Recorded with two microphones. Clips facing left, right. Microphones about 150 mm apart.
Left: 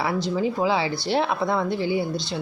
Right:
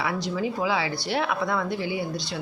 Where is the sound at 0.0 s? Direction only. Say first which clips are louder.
Left 3 dB; 30° left (ahead or behind).